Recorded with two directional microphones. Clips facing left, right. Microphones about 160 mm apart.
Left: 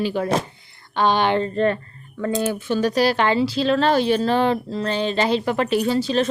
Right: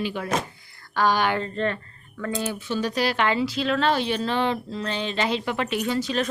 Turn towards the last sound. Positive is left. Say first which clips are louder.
# left 5 dB
turn(degrees=30)  # may be behind; listen again after turning